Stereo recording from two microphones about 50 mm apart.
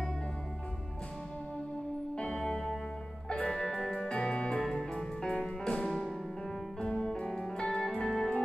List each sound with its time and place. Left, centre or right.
2.1 s music: centre
5.4 s music: centre
6.8 s music: centre